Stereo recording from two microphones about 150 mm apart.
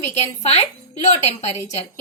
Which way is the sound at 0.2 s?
45° left (ahead or behind).